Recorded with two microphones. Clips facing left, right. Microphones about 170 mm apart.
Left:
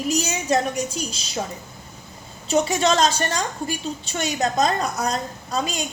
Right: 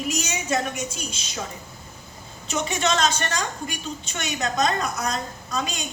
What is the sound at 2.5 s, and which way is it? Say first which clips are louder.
A woman's voice: left 5 dB; 35° left (ahead or behind).